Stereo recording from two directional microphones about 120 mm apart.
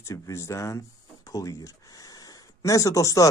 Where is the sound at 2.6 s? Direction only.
25° left (ahead or behind).